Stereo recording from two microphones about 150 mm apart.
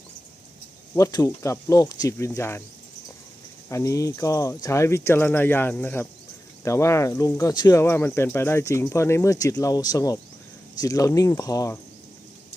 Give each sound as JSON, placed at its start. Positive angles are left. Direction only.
{"t": 0.9, "sound": "speech", "side_deg": 20}
{"t": 3.7, "sound": "speech", "side_deg": 20}